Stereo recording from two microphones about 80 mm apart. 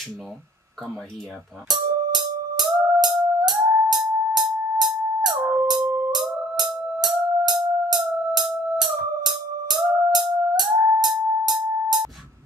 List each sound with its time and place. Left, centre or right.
1.7 s music: right